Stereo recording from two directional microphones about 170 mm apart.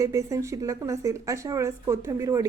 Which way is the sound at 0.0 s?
20° right (ahead or behind).